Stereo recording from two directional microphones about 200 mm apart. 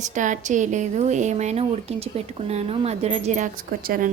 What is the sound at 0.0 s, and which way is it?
Speech, 40° right (ahead or behind).